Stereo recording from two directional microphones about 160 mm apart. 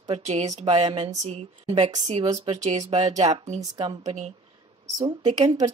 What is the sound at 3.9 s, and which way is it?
Speech, 40° right (ahead or behind).